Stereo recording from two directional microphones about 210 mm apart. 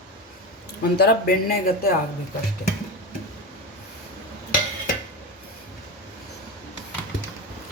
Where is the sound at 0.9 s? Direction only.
45° left (ahead or behind).